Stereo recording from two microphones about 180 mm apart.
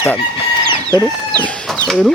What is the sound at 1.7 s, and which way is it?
Chicken, 5° left (ahead or behind).